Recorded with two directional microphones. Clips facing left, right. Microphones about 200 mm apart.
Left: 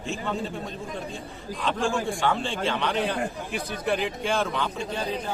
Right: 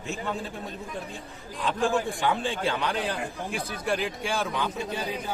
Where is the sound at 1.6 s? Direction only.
15° right (ahead or behind).